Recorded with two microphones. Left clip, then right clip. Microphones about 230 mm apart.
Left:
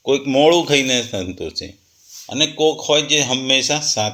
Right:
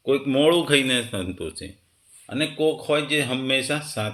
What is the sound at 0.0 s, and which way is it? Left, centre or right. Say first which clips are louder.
Speech: left 5 dB; centre.